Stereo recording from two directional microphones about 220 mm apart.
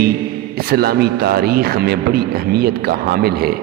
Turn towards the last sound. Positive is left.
turn(degrees=-45)  # may be behind; listen again after turning